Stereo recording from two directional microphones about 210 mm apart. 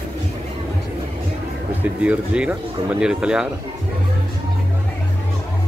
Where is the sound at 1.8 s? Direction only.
5° right (ahead or behind).